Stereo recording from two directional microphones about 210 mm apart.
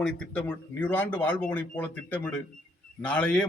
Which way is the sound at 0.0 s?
5° left (ahead or behind).